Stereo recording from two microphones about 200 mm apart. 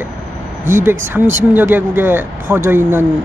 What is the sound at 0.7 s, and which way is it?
Speech, 10° right (ahead or behind).